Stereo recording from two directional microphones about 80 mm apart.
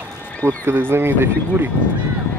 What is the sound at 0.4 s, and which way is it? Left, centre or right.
Speech, right.